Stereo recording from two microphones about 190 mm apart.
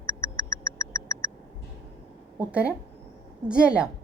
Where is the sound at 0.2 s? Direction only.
15° left (ahead or behind).